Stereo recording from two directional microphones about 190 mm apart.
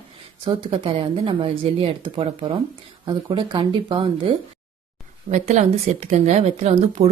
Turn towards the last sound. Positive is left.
turn(degrees=-35)  # may be behind; listen again after turning